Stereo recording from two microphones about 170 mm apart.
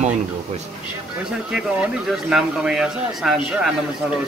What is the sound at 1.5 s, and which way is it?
Speech, 5° right (ahead or behind).